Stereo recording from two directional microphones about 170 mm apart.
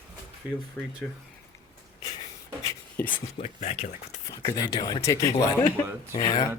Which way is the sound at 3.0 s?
10° left (ahead or behind).